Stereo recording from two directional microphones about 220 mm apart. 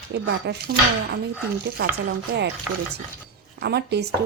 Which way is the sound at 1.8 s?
45° right (ahead or behind).